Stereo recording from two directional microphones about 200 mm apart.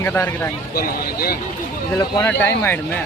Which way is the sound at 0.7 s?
50° left (ahead or behind).